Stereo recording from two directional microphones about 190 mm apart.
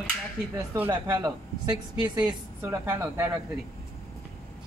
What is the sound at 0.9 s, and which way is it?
A woman's voice, 20° right (ahead or behind).